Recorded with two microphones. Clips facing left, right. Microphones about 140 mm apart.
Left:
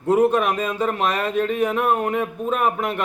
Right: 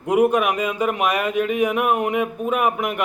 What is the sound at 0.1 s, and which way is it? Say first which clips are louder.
A man's voice: even; 10° right (ahead or behind).